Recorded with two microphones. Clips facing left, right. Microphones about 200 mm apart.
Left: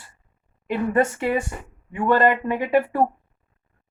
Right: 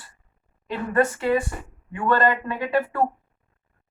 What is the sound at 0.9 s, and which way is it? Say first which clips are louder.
Speech: right 2 dB; 25° left (ahead or behind).